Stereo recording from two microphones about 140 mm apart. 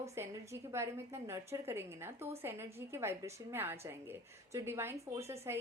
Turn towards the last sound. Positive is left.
turn(degrees=-20)  # may be behind; listen again after turning